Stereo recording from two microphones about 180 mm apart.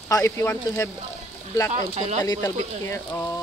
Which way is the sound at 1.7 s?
40° right (ahead or behind).